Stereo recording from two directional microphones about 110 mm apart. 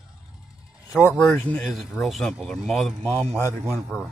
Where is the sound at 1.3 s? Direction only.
10° left (ahead or behind).